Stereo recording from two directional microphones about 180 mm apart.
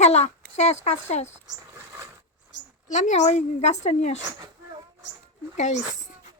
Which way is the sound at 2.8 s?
45° left (ahead or behind).